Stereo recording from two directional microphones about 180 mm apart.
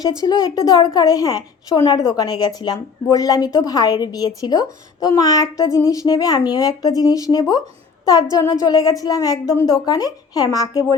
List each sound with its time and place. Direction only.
0.2 s speech: 20° left (ahead or behind)